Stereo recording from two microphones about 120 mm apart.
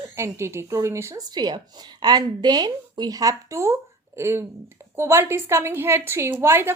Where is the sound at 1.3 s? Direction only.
35° right (ahead or behind).